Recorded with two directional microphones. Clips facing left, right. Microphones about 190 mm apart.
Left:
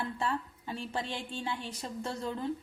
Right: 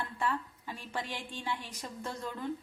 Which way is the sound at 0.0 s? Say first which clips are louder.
Left 1 dB; 25° left (ahead or behind).